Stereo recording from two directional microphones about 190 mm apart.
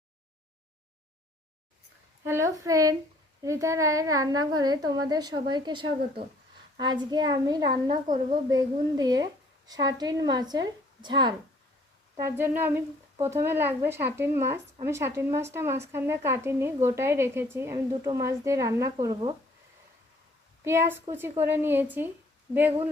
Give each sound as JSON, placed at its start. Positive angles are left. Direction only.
{"t": 2.2, "sound": "a woman's voice", "side_deg": -15}
{"t": 12.2, "sound": "a woman's voice", "side_deg": -10}
{"t": 20.7, "sound": "a woman's voice", "side_deg": -10}